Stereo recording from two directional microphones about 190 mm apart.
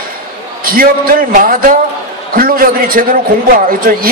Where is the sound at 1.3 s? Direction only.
45° right (ahead or behind).